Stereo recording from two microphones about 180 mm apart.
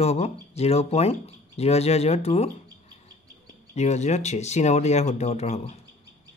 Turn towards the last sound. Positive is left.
turn(degrees=40)  # may be behind; listen again after turning